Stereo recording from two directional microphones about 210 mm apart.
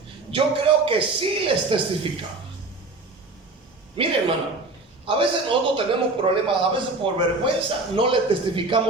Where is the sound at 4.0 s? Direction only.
25° right (ahead or behind).